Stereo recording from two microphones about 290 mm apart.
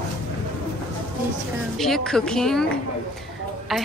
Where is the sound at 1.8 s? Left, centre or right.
Centre.